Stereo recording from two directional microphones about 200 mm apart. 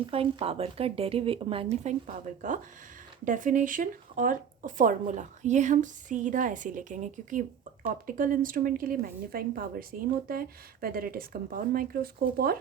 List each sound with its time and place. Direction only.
0.0 s speech: 25° right (ahead or behind); by 12.5 s 50° right (ahead or behind)